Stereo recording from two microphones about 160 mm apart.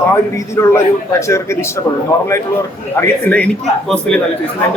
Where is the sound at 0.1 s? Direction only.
15° left (ahead or behind).